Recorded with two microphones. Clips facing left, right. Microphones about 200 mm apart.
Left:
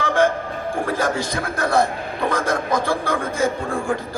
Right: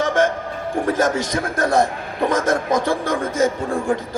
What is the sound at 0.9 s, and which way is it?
A man's voice, 20° right (ahead or behind).